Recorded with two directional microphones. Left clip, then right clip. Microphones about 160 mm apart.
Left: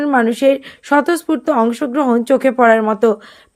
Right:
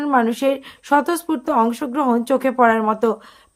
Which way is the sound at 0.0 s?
20° left (ahead or behind).